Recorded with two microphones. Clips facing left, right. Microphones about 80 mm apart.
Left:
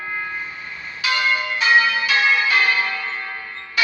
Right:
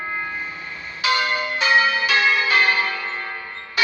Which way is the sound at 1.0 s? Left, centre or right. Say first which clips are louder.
Even; right.